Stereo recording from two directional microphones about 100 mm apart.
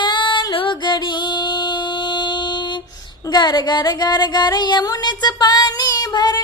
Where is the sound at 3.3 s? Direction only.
45° left (ahead or behind).